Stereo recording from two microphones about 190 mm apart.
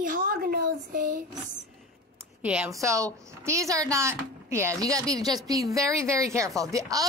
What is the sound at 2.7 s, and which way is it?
A woman's voice, 15° right (ahead or behind).